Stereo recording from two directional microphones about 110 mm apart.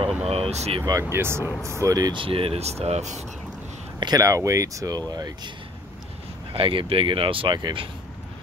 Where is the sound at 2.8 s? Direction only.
85° right.